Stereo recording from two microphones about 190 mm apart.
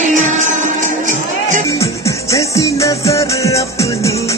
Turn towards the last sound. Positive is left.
turn(degrees=15)  # may be behind; listen again after turning